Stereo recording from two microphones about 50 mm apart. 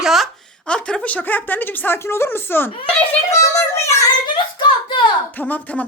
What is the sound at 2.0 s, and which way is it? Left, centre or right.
Speech, left.